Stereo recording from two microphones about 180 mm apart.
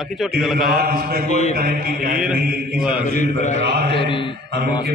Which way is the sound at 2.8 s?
5° right (ahead or behind).